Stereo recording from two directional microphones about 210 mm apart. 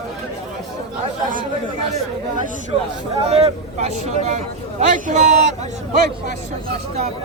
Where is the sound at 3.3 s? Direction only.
30° right (ahead or behind).